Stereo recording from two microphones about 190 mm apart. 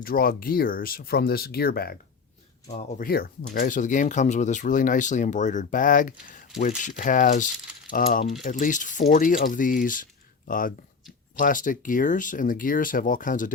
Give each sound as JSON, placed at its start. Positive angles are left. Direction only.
{"t": 0.0, "sound": "speech", "side_deg": 50}
{"t": 3.0, "sound": "speech", "side_deg": 55}